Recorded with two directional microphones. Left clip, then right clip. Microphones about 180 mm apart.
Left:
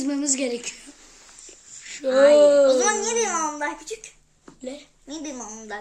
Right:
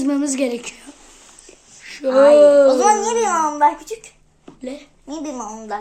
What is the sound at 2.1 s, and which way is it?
Speech, 25° right (ahead or behind).